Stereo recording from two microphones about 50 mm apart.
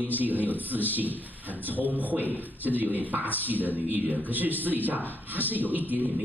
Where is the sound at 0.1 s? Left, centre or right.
Right.